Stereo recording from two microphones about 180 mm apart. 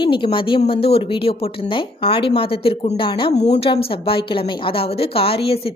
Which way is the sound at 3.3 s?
40° left (ahead or behind).